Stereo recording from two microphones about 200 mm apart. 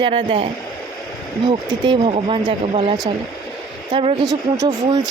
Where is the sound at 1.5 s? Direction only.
25° right (ahead or behind).